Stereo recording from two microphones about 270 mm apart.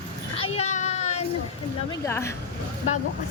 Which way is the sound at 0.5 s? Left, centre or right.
Left.